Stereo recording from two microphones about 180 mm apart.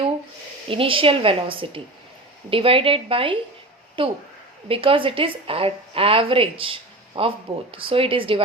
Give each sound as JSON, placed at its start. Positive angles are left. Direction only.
{"t": 0.7, "sound": "a woman's voice", "side_deg": -30}